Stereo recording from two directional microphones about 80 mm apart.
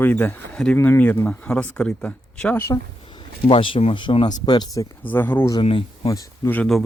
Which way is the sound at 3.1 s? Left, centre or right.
Left.